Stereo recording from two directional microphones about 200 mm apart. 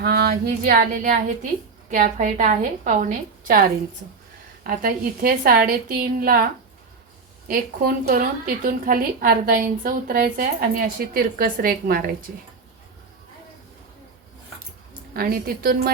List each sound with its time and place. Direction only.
0.0 s a woman's voice: 50° right (ahead or behind)
4.6 s speech: 45° right (ahead or behind)
15.1 s speech: 50° right (ahead or behind)